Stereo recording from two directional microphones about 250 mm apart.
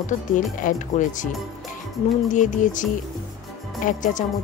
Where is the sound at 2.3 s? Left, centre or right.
Left.